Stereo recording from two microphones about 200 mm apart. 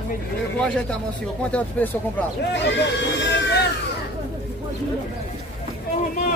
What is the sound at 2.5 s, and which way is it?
Speech, 60° left (ahead or behind).